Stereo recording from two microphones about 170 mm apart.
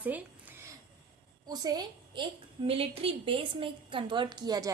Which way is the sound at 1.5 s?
25° right (ahead or behind).